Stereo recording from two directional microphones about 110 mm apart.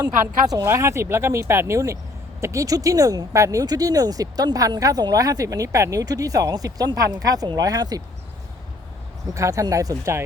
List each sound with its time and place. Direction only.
0.0 s speech: 35° right (ahead or behind)
9.2 s speech: 30° right (ahead or behind)